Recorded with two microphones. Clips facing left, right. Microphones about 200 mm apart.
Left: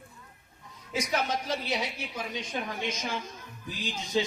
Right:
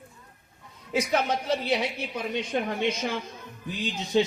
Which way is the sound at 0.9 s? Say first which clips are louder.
Right 4 dB; 60° right (ahead or behind).